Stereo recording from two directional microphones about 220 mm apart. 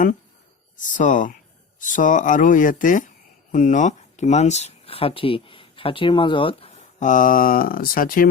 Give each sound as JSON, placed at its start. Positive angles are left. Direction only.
{"t": 0.9, "sound": "speech", "side_deg": 35}